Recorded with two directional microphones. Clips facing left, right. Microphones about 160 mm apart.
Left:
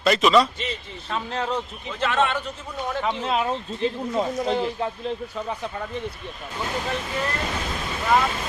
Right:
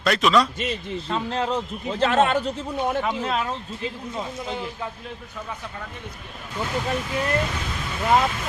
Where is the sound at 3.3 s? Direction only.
15° left (ahead or behind).